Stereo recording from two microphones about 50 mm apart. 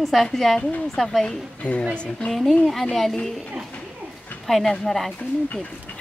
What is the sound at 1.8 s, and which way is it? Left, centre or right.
Speech, left.